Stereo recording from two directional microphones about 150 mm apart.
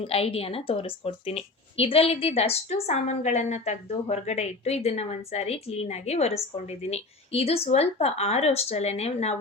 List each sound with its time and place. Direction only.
0.0 s a woman's voice: 40° left (ahead or behind)